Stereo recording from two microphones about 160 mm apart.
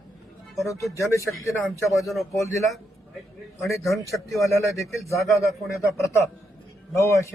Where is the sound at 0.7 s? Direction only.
20° left (ahead or behind).